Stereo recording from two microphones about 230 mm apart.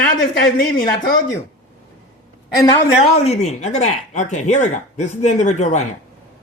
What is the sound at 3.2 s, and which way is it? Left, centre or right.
Speech, left.